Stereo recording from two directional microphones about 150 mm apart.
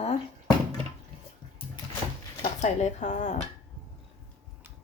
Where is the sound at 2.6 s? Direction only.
50° left (ahead or behind).